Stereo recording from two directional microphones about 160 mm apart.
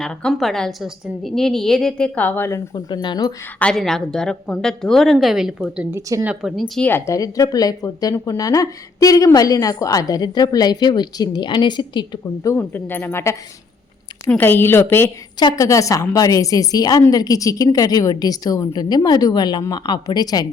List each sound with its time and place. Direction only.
0.0 s a woman's voice: 5° left (ahead or behind)
2.7 s speech: 25° left (ahead or behind)
3.6 s a woman's voice: 5° left (ahead or behind)
6.8 s a woman's voice: 15° left (ahead or behind)